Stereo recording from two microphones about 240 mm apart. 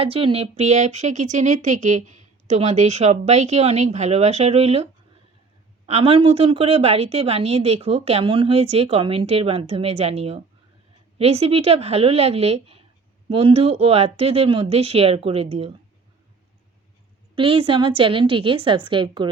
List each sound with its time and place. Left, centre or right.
0.0 s speech: right
17.3 s speech: right